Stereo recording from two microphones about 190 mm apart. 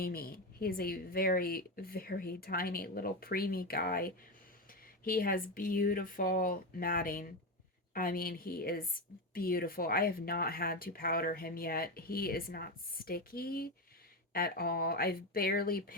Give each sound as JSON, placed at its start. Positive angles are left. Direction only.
{"t": 0.0, "sound": "speech", "side_deg": 50}